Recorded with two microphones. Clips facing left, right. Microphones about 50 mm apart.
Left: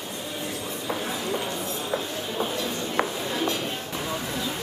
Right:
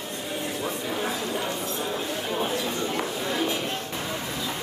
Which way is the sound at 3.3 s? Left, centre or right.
Centre.